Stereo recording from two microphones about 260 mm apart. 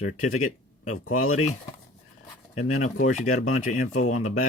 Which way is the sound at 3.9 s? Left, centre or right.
Left.